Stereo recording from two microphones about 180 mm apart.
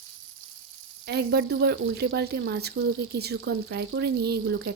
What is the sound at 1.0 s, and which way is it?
Speech, 65° right (ahead or behind).